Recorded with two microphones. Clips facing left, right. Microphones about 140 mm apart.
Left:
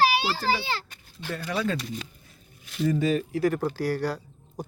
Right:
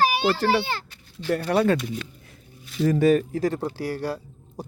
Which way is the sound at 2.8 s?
60° right (ahead or behind).